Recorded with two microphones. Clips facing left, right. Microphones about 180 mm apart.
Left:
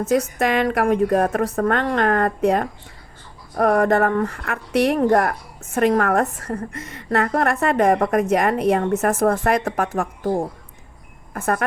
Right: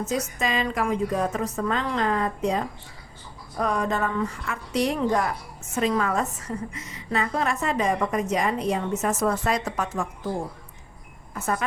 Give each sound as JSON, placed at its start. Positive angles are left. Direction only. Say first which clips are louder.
{"t": 0.0, "sound": "speech", "louder": "left 7 dB", "side_deg": 60}